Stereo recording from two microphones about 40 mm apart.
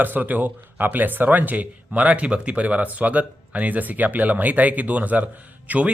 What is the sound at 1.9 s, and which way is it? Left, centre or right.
Speech, right.